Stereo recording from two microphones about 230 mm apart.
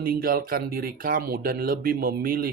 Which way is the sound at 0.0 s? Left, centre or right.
Right.